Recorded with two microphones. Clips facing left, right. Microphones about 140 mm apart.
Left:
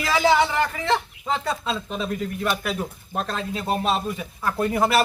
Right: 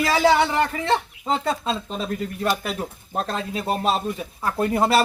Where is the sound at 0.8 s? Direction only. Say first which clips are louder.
Right 1 dB; 30° right (ahead or behind).